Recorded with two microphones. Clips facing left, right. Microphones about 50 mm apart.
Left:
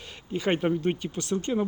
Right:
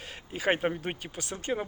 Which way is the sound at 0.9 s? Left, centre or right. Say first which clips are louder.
Left 8 dB; right.